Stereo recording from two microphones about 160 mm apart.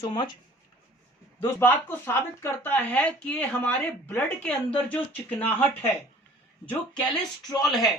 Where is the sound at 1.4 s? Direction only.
10° left (ahead or behind).